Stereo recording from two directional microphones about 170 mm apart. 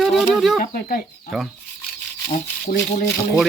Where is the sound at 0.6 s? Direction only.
55° left (ahead or behind).